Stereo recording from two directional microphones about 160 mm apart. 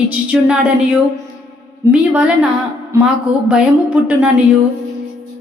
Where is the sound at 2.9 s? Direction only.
20° right (ahead or behind).